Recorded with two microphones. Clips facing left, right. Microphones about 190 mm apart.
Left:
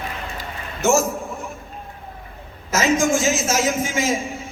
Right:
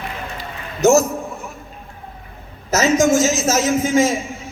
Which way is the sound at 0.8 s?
40° right (ahead or behind).